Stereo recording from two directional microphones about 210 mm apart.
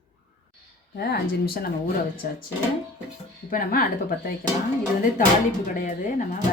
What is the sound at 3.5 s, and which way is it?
Speech, 40° left (ahead or behind).